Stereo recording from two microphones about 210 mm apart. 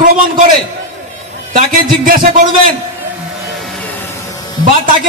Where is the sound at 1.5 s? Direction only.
40° right (ahead or behind).